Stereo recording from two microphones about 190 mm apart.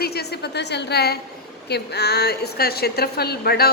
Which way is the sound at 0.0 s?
55° left (ahead or behind).